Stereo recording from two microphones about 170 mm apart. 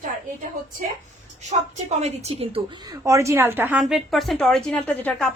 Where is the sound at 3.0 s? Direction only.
15° right (ahead or behind); by 5.3 s 5° left (ahead or behind).